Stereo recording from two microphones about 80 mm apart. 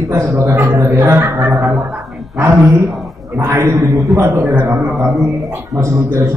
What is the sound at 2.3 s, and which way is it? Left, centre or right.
A man's voice, right.